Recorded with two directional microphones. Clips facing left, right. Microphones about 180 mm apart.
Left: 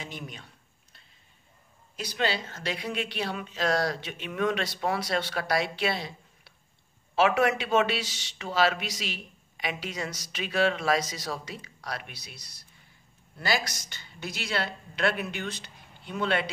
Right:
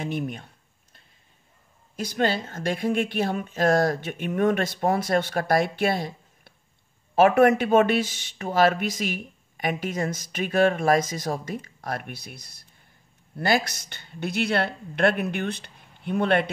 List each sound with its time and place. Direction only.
0.0 s speech: 55° right (ahead or behind)
2.0 s speech: 50° right (ahead or behind)